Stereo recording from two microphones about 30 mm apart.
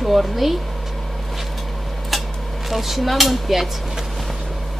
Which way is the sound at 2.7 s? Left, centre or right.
Centre.